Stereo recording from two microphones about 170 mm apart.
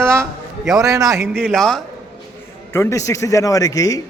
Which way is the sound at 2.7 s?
15° left (ahead or behind).